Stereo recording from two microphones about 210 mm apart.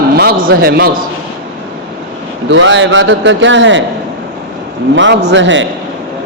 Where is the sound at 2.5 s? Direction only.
65° right (ahead or behind).